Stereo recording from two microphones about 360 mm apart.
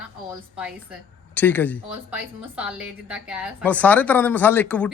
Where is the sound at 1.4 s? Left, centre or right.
Centre.